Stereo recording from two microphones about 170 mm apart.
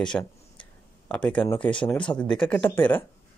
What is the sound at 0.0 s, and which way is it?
Speech, 5° left (ahead or behind).